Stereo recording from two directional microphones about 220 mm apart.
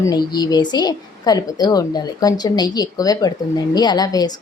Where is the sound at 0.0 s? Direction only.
20° left (ahead or behind).